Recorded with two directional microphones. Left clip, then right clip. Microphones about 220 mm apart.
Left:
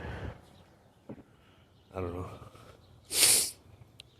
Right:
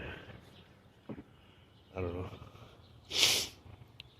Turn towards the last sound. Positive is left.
turn(degrees=20)  # may be behind; listen again after turning